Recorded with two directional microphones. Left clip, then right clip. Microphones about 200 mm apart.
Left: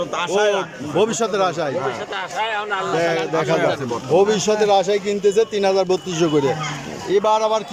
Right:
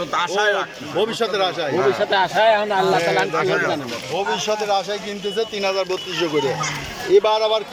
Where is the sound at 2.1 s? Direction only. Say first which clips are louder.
Right 10 dB; 50° right (ahead or behind).